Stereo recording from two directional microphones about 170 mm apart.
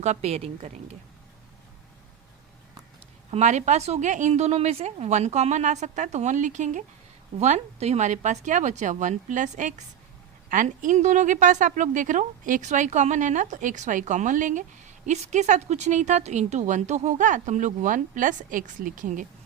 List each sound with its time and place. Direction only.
0.0 s a woman's voice: 40° right (ahead or behind)
3.3 s a woman's voice: 45° right (ahead or behind)